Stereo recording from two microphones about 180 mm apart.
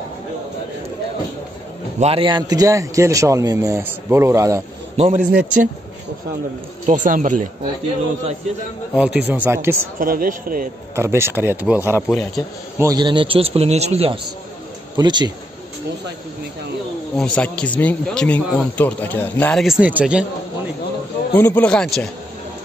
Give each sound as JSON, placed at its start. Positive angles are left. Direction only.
{"t": 2.0, "sound": "speech", "side_deg": -30}
{"t": 5.0, "sound": "a man's voice", "side_deg": -50}
{"t": 5.3, "sound": "speech", "side_deg": -10}
{"t": 6.9, "sound": "a man's voice", "side_deg": -45}
{"t": 8.9, "sound": "speech", "side_deg": -5}
{"t": 9.9, "sound": "a man's voice", "side_deg": -50}
{"t": 11.0, "sound": "speech", "side_deg": -15}
{"t": 15.0, "sound": "speech", "side_deg": -25}
{"t": 17.2, "sound": "speech", "side_deg": 5}
{"t": 19.6, "sound": "speech", "side_deg": -5}
{"t": 21.3, "sound": "a man's voice", "side_deg": 10}